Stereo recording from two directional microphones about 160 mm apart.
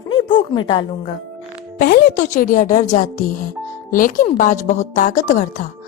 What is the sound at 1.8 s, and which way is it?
A woman's voice, 65° left (ahead or behind).